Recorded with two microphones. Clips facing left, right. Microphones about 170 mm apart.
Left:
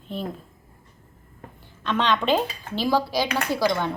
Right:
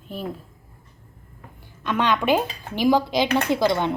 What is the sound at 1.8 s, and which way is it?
A woman's voice, 10° right (ahead or behind).